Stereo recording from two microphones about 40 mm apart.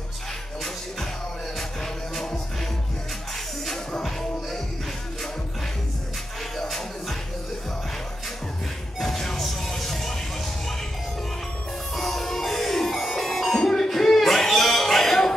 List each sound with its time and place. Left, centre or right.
3.7 s music: centre
6.6 s music: centre
9.0 s music: centre
11.9 s music: centre